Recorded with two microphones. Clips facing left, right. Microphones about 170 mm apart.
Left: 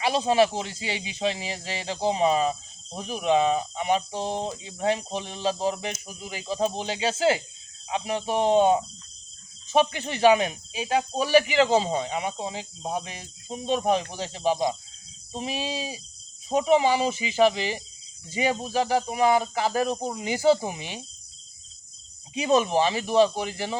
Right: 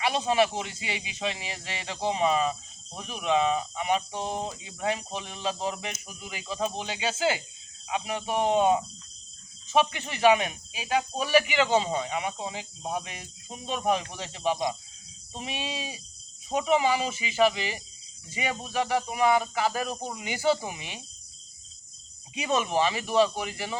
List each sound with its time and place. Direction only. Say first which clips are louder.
0.0 s speech: left 3 dB; 35° left (ahead or behind)
22.4 s speech: left 4 dB; 35° left (ahead or behind)